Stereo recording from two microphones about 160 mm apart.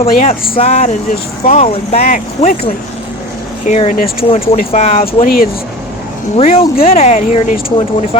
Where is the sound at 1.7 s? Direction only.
40° left (ahead or behind).